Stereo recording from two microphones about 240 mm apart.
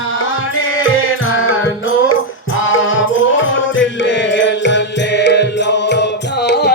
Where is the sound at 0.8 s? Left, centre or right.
Left.